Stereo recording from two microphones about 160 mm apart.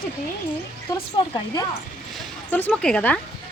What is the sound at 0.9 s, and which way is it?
Speech, 25° left (ahead or behind).